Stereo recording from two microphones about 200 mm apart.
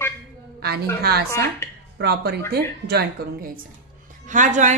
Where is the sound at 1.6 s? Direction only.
10° left (ahead or behind).